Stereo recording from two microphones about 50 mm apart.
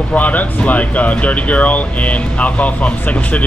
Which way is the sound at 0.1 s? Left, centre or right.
Left.